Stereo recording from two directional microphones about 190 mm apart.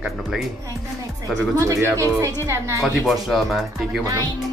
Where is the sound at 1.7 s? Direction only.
15° right (ahead or behind).